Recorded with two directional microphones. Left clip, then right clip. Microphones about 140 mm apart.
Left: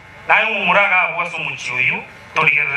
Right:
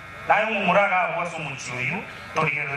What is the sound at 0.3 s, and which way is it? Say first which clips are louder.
A man's voice: left 6 dB; 35° left (ahead or behind).